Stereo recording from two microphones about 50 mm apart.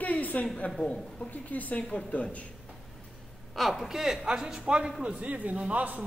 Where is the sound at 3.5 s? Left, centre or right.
Centre.